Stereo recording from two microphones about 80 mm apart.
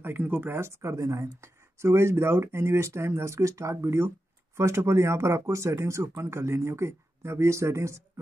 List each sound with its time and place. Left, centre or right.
0.0 s speech: right